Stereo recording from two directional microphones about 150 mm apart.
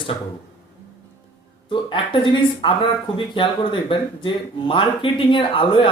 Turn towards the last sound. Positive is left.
turn(degrees=35)  # may be behind; listen again after turning